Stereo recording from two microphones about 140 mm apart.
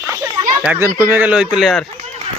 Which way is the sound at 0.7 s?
20° right (ahead or behind).